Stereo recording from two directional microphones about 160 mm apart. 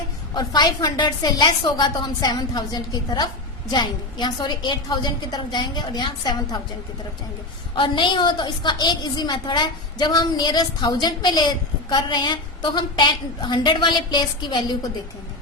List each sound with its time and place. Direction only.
0.3 s a woman's voice: 25° left (ahead or behind)
7.8 s a woman's voice: 30° left (ahead or behind)